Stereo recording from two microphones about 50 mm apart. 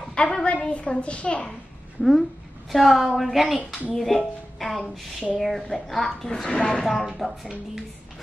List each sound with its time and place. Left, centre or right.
0.1 s a sound: centre
2.0 s a woman's voice: centre; by 6.8 s left
7.1 s speech: centre